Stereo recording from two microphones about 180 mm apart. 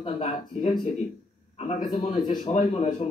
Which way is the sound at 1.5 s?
40° left (ahead or behind).